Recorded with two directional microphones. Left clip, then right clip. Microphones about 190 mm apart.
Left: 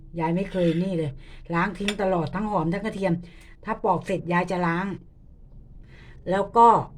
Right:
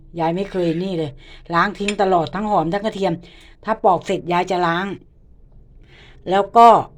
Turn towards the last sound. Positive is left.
turn(degrees=-15)  # may be behind; listen again after turning